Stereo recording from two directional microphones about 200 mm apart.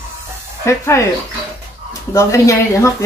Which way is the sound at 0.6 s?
15° left (ahead or behind).